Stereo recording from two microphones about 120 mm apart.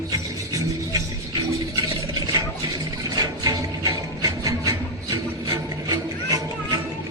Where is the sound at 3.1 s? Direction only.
35° right (ahead or behind).